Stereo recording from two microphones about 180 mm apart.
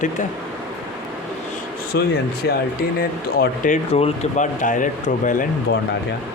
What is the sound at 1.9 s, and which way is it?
Speech, 70° left (ahead or behind).